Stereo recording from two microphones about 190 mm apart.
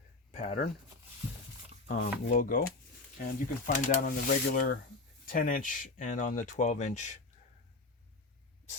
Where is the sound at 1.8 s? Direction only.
45° left (ahead or behind).